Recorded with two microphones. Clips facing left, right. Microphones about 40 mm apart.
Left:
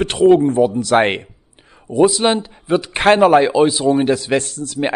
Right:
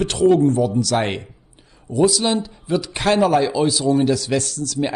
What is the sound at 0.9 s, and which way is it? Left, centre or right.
Speech, left.